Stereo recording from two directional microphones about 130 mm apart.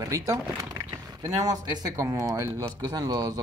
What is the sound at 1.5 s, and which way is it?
Speech, 25° right (ahead or behind).